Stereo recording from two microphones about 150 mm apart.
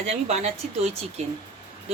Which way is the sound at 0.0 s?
45° right (ahead or behind).